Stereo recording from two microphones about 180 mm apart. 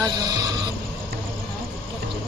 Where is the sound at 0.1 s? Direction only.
20° right (ahead or behind).